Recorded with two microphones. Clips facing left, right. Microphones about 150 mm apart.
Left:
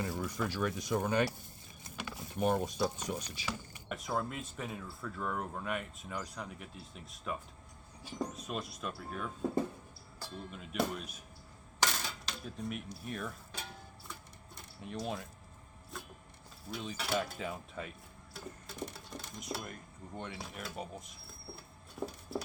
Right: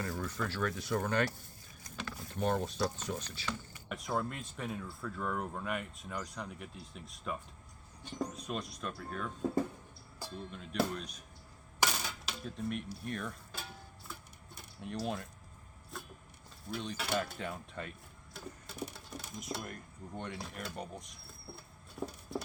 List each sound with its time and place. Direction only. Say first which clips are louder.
0.0 s speech: left 1 dB; 15° left (ahead or behind)
1.8 s a sound: even; 15° left (ahead or behind)
2.3 s speech: left 2 dB; 10° left (ahead or behind)
3.8 s speech: even; centre (ahead or behind)
10.5 s speech: right 1 dB; 5° left (ahead or behind)
11.8 s coin: right 1 dB; 5° right (ahead or behind)
12.4 s speech: right 3 dB; centre (ahead or behind)
15.9 s vehicle: even; centre (ahead or behind)
16.7 s speech: even; centre (ahead or behind)
18.3 s a sound: even; 5° right (ahead or behind)
18.9 s speech: even; centre (ahead or behind)
22.0 s a sound: left 1 dB; centre (ahead or behind)